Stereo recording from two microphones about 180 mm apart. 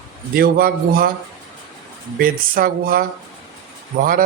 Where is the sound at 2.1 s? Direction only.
55° right (ahead or behind).